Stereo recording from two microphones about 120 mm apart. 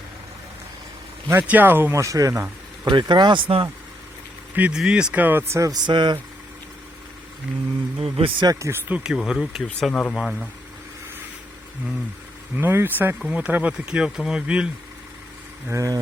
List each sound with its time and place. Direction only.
1.3 s speech: 15° right (ahead or behind)
2.8 s speech: 40° right (ahead or behind)
4.5 s speech: 10° right (ahead or behind); by 5.7 s 25° right (ahead or behind)
5.8 s speech: 40° right (ahead or behind)
7.9 s speech: 50° right (ahead or behind)
8.4 s speech: 25° right (ahead or behind)
8.9 s speech: 5° right (ahead or behind)
9.8 s speech: 5° left (ahead or behind)
12.5 s speech: 20° right (ahead or behind)
15.7 s speech: 25° right (ahead or behind)